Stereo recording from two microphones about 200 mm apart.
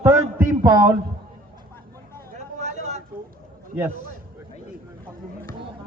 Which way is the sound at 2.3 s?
35° right (ahead or behind).